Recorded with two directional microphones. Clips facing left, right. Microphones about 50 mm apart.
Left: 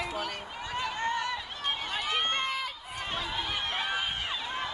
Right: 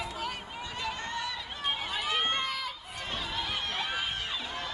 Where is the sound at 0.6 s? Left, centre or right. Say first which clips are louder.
Left 4 dB; left.